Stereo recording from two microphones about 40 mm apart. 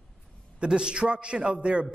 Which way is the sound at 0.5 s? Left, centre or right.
Right.